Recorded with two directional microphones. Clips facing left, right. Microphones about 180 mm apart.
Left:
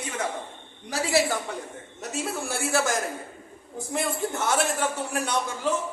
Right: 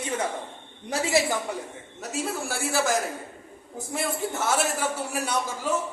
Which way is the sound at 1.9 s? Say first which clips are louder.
Right 1 dB; centre (ahead or behind).